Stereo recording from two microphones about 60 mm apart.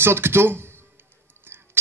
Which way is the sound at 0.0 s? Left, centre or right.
Right.